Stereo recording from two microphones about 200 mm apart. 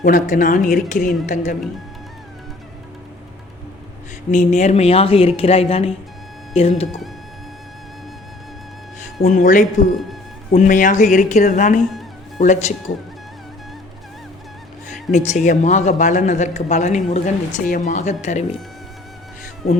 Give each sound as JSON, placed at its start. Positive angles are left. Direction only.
{"t": 0.0, "sound": "speech", "side_deg": 40}
{"t": 4.3, "sound": "speech", "side_deg": 35}
{"t": 9.2, "sound": "speech", "side_deg": 40}
{"t": 15.1, "sound": "speech", "side_deg": 35}